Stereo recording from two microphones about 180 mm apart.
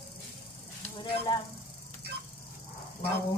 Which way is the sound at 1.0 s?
25° left (ahead or behind).